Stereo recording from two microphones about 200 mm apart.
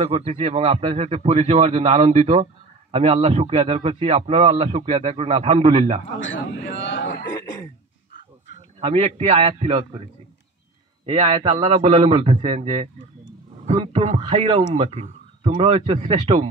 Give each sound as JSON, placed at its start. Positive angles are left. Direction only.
{"t": 0.0, "sound": "a man's voice", "side_deg": -30}
{"t": 6.1, "sound": "a man's voice", "side_deg": 70}
{"t": 6.7, "sound": "a sound", "side_deg": 65}
{"t": 8.7, "sound": "a man's voice", "side_deg": -30}
{"t": 11.1, "sound": "a man's voice", "side_deg": -30}